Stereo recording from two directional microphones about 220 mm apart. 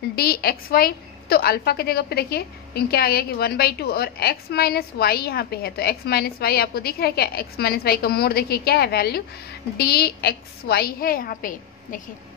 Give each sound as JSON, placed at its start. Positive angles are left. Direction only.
{"t": 0.1, "sound": "a woman's voice", "side_deg": 45}